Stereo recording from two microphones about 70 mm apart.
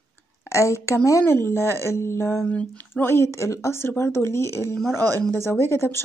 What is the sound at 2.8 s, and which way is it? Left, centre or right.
Speech, left.